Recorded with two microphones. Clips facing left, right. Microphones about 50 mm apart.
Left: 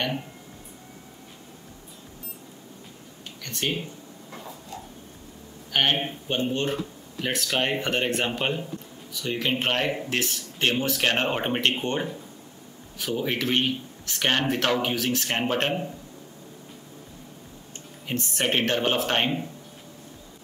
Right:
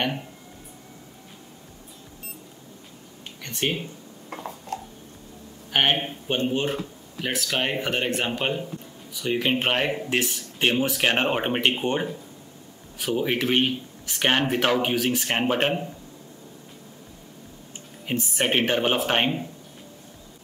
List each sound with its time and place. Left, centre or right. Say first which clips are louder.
4.7 s a sound: right 7 dB; right
5.7 s speech: right 1 dB; centre
9.1 s speech: right 3 dB; centre
18.0 s speech: right 2 dB; centre